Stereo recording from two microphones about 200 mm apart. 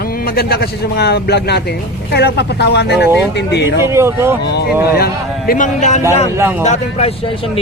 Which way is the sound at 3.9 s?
15° right (ahead or behind).